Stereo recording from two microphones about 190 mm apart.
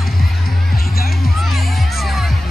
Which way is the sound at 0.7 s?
50° left (ahead or behind).